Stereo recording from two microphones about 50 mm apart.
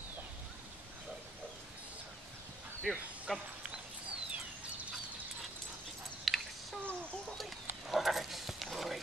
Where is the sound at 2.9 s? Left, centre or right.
Centre.